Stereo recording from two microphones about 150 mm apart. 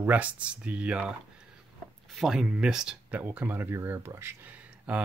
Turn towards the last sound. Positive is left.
turn(degrees=-10)  # may be behind; listen again after turning